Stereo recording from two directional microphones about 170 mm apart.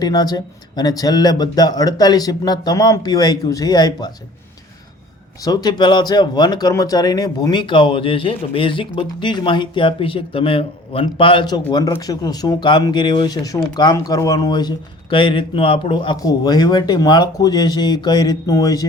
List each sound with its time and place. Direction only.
0.0 s speech: 25° left (ahead or behind)
5.4 s speech: 25° left (ahead or behind)